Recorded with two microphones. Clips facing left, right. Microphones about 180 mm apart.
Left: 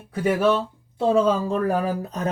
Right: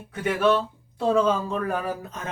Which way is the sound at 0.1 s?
35° left (ahead or behind).